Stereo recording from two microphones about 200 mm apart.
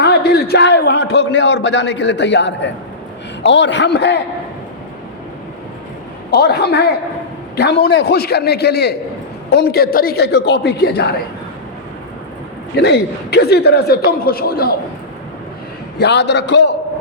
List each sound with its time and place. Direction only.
0.0 s a man's voice: 55° left (ahead or behind)
6.3 s a man's voice: 55° left (ahead or behind)
12.7 s speech: 55° left (ahead or behind)
16.0 s a man's voice: 60° left (ahead or behind)